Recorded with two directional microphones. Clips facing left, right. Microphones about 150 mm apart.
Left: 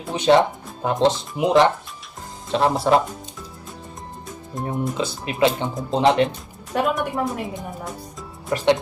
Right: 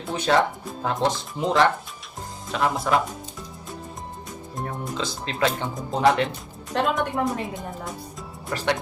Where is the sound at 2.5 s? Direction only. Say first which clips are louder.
Left 5 dB; 30° left (ahead or behind).